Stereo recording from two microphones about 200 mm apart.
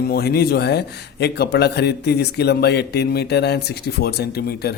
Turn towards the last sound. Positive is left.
turn(degrees=50)  # may be behind; listen again after turning